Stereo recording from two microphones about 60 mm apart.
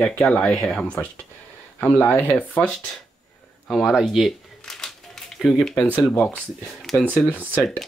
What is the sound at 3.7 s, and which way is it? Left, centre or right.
Speech, centre.